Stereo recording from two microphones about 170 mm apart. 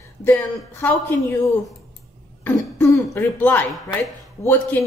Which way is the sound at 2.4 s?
10° left (ahead or behind).